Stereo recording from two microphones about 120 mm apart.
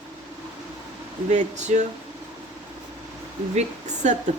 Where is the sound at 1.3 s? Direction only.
75° right (ahead or behind).